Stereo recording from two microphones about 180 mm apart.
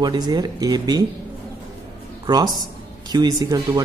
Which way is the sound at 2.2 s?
20° right (ahead or behind).